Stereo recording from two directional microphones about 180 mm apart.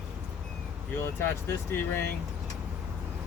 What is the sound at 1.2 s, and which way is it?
Speech, 10° left (ahead or behind).